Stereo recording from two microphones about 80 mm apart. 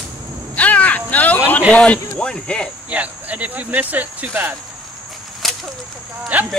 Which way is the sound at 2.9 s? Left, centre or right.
Centre.